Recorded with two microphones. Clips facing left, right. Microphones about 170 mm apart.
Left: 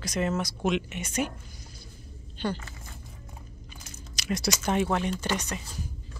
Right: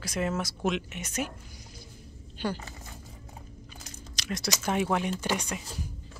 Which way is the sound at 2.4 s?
10° right (ahead or behind).